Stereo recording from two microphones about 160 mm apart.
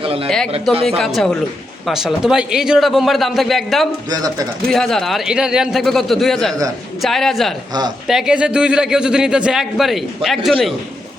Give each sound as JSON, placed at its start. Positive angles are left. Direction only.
{"t": 0.0, "sound": "speech", "side_deg": -35}
{"t": 0.9, "sound": "a man's voice", "side_deg": 0}
{"t": 4.1, "sound": "a man's voice", "side_deg": -25}
{"t": 4.7, "sound": "a man's voice", "side_deg": 5}
{"t": 7.7, "sound": "a man's voice", "side_deg": -25}
{"t": 8.0, "sound": "a man's voice", "side_deg": -5}